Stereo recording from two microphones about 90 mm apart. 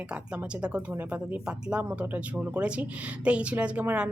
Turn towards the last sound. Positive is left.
turn(degrees=-15)  # may be behind; listen again after turning